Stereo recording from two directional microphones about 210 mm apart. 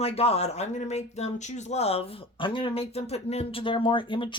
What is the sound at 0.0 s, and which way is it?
Speech, 30° left (ahead or behind).